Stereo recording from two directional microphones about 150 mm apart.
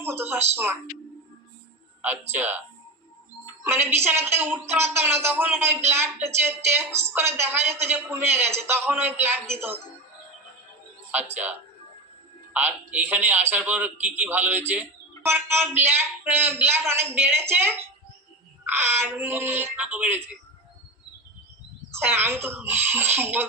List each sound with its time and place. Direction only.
0.0 s a sound: 15° right (ahead or behind)
2.0 s speech: 15° right (ahead or behind)
11.1 s speech: 10° right (ahead or behind)
12.5 s speech: 10° right (ahead or behind)
21.9 s speech: 15° right (ahead or behind)